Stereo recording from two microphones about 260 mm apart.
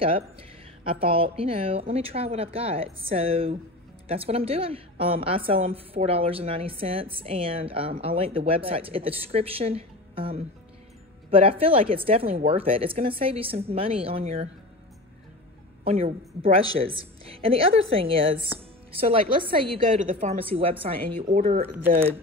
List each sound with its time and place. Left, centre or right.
0.8 s a woman's voice: right
15.8 s a woman's voice: right